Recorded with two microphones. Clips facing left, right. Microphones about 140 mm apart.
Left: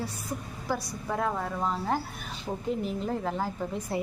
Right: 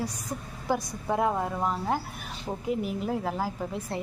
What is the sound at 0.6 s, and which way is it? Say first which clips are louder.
A woman's voice: right 4 dB; 20° right (ahead or behind).